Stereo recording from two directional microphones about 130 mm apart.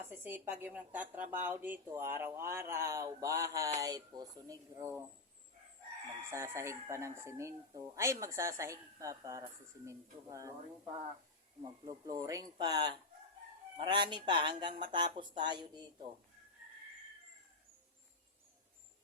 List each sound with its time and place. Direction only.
0.1 s a woman's voice: 15° right (ahead or behind)
6.3 s speech: 20° right (ahead or behind)
11.6 s speech: 30° right (ahead or behind)